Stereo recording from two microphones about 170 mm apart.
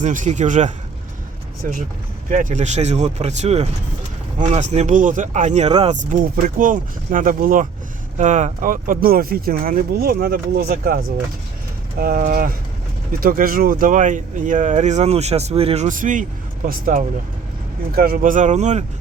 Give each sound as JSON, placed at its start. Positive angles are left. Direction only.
{"t": 0.0, "sound": "speech", "side_deg": -45}
{"t": 2.3, "sound": "speech", "side_deg": -45}
{"t": 6.1, "sound": "speech", "side_deg": -55}